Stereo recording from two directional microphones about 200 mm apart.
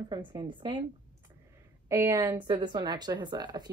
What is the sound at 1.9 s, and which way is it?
A woman's voice, 15° right (ahead or behind).